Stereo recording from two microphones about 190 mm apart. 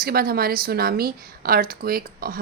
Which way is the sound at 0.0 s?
50° right (ahead or behind).